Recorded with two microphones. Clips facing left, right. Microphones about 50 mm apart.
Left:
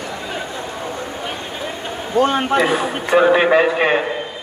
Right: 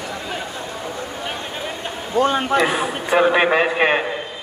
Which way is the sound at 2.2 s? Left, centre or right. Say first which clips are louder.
Left 2 dB; left.